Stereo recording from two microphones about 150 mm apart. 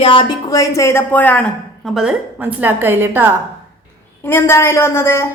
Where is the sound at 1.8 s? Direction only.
5° right (ahead or behind).